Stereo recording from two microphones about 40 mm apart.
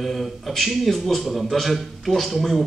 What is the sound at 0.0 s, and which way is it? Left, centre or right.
Speech, centre.